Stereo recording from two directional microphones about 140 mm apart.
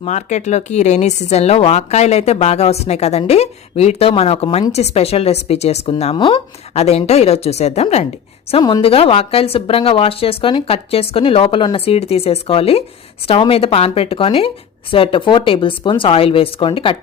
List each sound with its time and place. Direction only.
0.0 s a woman's voice: 55° left (ahead or behind)
8.6 s a woman's voice: 40° left (ahead or behind)